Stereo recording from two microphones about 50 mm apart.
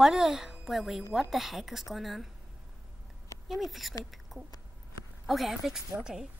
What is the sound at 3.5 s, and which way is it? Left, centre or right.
Speech, centre.